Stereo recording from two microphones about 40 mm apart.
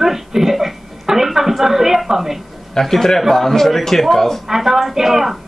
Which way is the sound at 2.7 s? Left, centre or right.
Centre.